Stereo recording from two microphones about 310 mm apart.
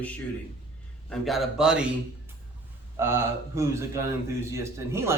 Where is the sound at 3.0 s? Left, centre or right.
Centre.